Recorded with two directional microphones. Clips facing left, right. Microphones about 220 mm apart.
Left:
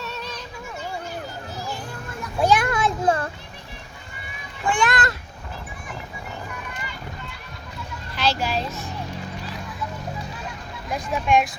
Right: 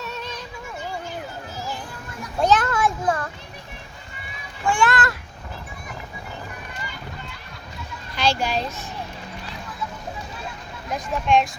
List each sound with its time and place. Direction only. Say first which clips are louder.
2.4 s a sound: even; 10° left (ahead or behind)
4.7 s a child's voice: right 1 dB; 15° left (ahead or behind)
8.1 s a child's voice: right 1 dB; 5° left (ahead or behind)
10.8 s speech: even; 10° left (ahead or behind)